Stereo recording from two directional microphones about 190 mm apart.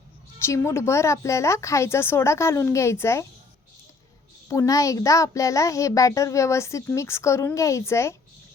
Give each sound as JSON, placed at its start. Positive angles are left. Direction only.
{"t": 0.3, "sound": "a child's voice", "side_deg": 15}
{"t": 4.4, "sound": "a child's voice", "side_deg": 15}